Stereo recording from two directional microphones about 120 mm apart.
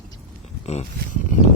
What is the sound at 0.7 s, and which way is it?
Speech, 65° left (ahead or behind).